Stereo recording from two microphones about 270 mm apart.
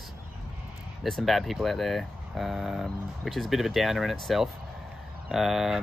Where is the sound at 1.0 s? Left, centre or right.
Centre.